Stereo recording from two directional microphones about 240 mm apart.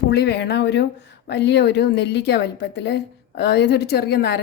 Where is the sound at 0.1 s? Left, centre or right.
Left.